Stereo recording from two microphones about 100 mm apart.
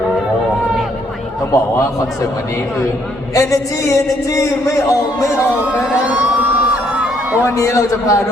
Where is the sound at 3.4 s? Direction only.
30° left (ahead or behind).